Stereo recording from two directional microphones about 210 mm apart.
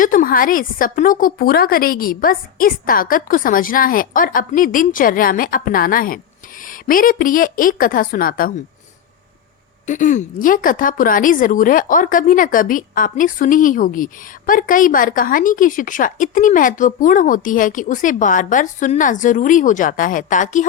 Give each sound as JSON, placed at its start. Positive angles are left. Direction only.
{"t": 0.0, "sound": "a woman's voice", "side_deg": 40}
{"t": 9.8, "sound": "a woman's voice", "side_deg": 35}